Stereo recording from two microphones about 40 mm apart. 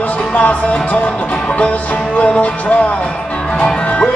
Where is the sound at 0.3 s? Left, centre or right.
Left.